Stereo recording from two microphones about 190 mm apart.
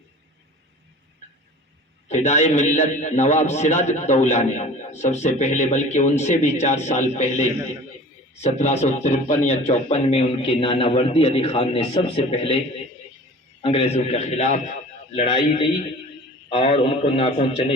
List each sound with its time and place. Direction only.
2.0 s a man's voice: 35° left (ahead or behind)